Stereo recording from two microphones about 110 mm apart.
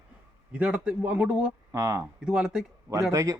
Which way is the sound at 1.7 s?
30° right (ahead or behind).